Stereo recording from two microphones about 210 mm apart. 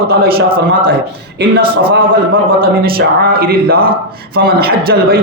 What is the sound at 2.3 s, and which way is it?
A man's voice, 45° right (ahead or behind).